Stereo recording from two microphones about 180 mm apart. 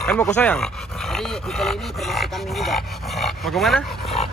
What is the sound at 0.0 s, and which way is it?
Dog, 5° left (ahead or behind).